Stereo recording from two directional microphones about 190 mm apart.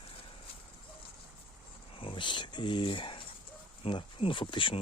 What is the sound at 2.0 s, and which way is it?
Speech, 25° left (ahead or behind).